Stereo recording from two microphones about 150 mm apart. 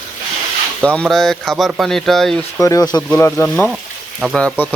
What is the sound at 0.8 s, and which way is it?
Speech, 5° left (ahead or behind).